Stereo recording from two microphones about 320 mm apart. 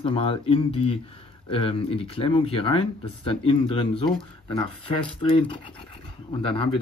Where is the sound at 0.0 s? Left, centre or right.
Centre.